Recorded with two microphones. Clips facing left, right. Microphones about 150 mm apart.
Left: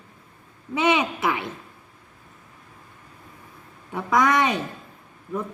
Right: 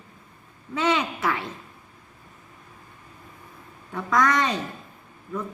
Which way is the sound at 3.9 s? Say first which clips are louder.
Left 2 dB; 15° left (ahead or behind).